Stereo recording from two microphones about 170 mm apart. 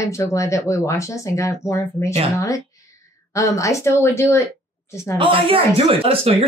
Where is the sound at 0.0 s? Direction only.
20° left (ahead or behind).